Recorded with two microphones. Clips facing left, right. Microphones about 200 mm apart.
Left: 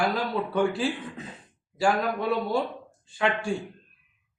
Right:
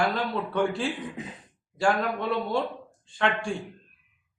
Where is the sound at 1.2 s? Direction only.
15° right (ahead or behind).